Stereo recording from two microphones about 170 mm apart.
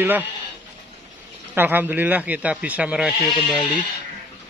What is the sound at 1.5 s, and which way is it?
A man's voice, 10° right (ahead or behind).